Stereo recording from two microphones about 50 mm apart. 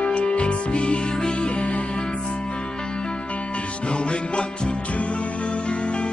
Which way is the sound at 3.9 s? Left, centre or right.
Left.